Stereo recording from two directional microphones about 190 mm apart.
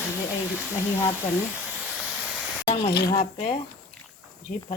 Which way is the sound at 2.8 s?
60° left (ahead or behind).